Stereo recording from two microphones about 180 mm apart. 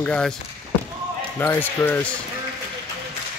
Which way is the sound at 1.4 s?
10° left (ahead or behind).